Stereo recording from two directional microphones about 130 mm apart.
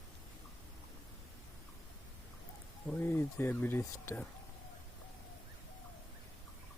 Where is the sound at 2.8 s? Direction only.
15° left (ahead or behind).